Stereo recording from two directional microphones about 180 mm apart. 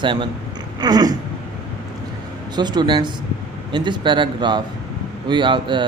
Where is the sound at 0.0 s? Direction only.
25° right (ahead or behind).